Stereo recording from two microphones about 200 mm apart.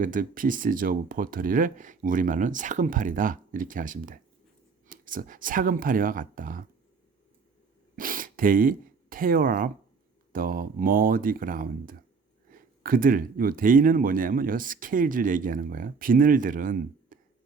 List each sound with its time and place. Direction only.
0.0 s speech: 40° right (ahead or behind)
7.9 s speech: 45° right (ahead or behind)